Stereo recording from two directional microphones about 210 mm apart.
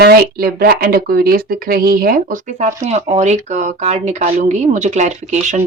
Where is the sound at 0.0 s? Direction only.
45° right (ahead or behind).